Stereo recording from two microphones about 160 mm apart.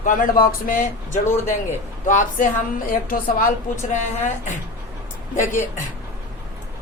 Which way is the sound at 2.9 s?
60° left (ahead or behind).